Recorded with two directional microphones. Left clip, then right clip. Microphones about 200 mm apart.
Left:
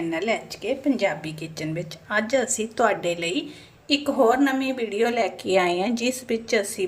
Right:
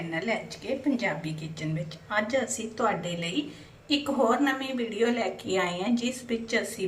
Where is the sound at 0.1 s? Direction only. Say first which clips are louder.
Left 1 dB; 50° left (ahead or behind).